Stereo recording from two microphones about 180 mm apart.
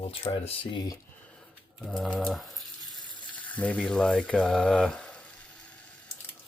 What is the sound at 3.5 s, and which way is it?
Speech, 5° left (ahead or behind).